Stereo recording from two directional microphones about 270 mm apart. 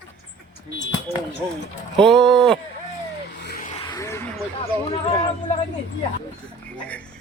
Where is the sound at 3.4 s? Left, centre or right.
Left.